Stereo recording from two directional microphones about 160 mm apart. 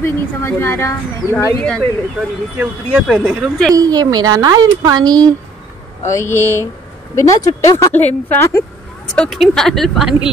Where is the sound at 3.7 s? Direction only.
25° right (ahead or behind).